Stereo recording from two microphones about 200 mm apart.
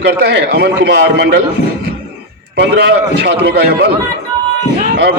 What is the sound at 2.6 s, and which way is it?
A man's voice, 55° right (ahead or behind).